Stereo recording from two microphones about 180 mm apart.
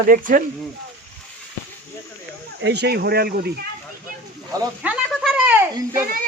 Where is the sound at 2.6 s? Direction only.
70° right (ahead or behind).